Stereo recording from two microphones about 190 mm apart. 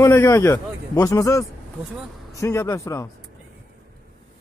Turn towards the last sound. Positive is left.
turn(degrees=15)  # may be behind; listen again after turning